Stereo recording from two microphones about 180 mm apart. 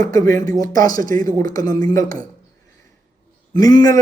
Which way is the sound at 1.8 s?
20° left (ahead or behind).